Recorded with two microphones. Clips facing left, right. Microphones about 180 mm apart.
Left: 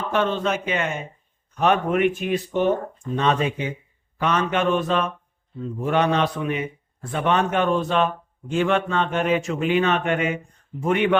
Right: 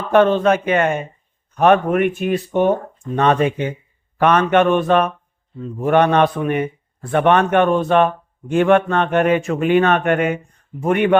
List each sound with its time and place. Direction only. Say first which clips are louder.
0.1 s a man's voice: right 10 dB; 55° right (ahead or behind)